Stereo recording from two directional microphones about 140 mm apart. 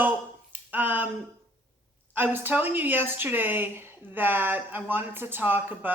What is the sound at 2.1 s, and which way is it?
Speech, 15° right (ahead or behind).